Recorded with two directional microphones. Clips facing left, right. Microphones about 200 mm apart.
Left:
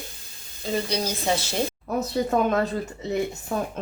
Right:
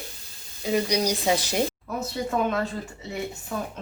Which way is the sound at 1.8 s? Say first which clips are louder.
Left 5 dB; 40° left (ahead or behind).